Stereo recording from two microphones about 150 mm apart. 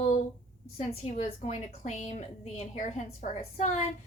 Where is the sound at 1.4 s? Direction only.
50° left (ahead or behind).